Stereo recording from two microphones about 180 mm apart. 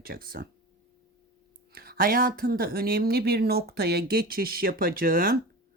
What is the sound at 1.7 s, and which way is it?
Speech, 60° right (ahead or behind).